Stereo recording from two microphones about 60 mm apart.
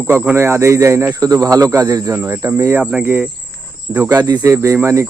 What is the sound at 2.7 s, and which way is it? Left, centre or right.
Speech, right.